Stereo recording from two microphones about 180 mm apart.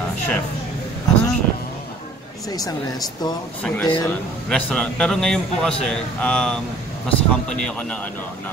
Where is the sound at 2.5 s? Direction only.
20° left (ahead or behind).